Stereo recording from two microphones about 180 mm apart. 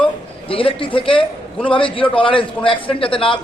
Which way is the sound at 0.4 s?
30° left (ahead or behind).